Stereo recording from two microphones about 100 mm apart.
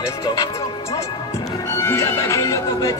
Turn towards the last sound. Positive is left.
turn(degrees=30)  # may be behind; listen again after turning